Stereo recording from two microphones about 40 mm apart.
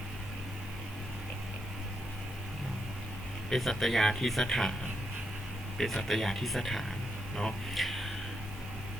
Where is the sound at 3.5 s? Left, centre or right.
Centre.